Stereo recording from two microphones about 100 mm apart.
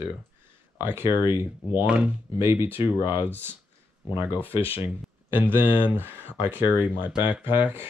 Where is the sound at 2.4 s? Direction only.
25° right (ahead or behind).